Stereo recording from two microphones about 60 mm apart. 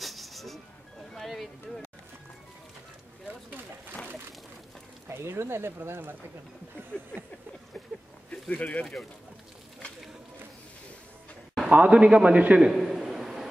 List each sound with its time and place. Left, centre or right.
0.0 s music: centre
1.1 s speech: centre
5.0 s a sound: right
5.4 s speech: right
8.3 s speech: centre
11.7 s a man's voice: right
12.6 s a sound: centre